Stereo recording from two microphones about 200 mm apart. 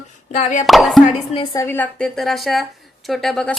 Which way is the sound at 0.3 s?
35° left (ahead or behind).